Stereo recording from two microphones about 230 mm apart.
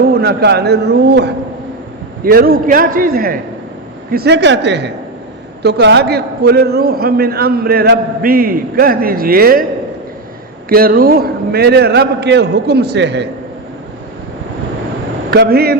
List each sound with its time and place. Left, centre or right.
0.0 s a man's voice: right
10.7 s a man's voice: right
15.3 s a man's voice: right